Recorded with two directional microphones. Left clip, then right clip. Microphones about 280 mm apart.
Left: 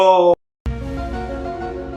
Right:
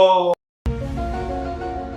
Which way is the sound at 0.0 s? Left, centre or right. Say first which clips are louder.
Left 2 dB; centre.